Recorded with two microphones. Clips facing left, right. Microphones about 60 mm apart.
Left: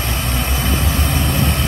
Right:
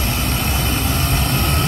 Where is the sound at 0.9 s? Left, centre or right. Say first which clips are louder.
Left 1 dB; right.